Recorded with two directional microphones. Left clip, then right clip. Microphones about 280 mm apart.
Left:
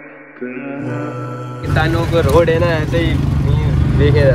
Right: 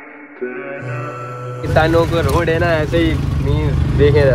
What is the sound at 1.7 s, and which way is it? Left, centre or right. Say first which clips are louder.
Speech: right 5 dB; right.